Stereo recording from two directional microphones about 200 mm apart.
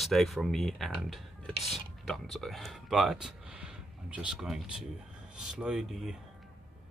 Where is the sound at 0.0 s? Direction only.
Centre (ahead or behind).